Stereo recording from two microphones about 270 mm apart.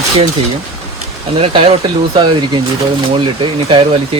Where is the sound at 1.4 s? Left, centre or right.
Centre.